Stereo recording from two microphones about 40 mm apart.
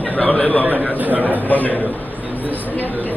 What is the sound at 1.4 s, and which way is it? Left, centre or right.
A man's voice, left.